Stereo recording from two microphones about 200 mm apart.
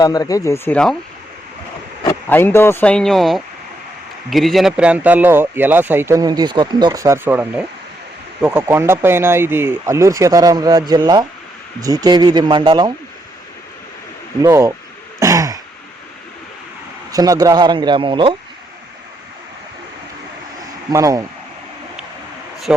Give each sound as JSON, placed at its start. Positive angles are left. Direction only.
{"t": 0.0, "sound": "speech", "side_deg": 20}
{"t": 2.0, "sound": "speech", "side_deg": 10}
{"t": 14.4, "sound": "speech", "side_deg": -15}
{"t": 15.2, "sound": "throat clearing", "side_deg": -15}
{"t": 17.1, "sound": "speech", "side_deg": -20}
{"t": 20.9, "sound": "speech", "side_deg": -15}